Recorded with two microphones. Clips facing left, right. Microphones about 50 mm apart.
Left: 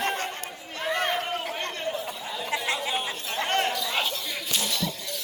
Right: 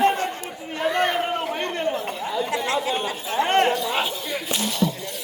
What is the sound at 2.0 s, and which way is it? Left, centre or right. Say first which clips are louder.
Chatter: right 6 dB; right.